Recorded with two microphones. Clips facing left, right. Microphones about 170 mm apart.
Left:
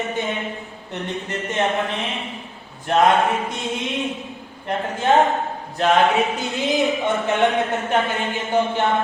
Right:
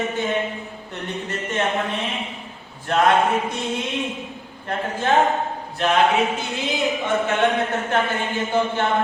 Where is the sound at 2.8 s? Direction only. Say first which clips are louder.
Left 1 dB; 20° left (ahead or behind).